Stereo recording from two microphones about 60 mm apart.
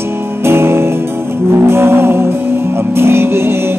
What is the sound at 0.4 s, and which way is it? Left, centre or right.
Music, right.